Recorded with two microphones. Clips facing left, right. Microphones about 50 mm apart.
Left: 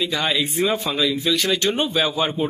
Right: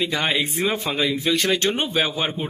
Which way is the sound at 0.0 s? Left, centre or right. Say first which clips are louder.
Even; right.